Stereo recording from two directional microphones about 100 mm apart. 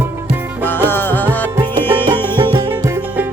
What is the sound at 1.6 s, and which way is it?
Music, 50° right (ahead or behind).